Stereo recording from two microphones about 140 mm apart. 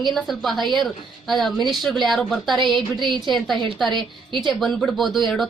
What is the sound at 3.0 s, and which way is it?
Speech, 35° right (ahead or behind).